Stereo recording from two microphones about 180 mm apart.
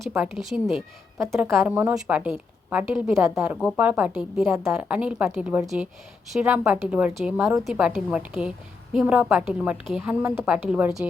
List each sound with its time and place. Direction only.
0.1 s a woman's voice: 5° right (ahead or behind)
1.2 s a woman's voice: 15° right (ahead or behind)